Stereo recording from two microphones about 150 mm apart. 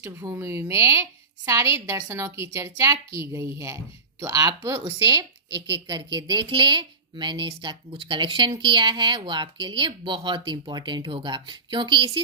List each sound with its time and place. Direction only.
0.0 s a woman's voice: 20° right (ahead or behind)